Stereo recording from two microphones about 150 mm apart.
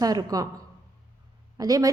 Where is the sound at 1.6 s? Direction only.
25° right (ahead or behind).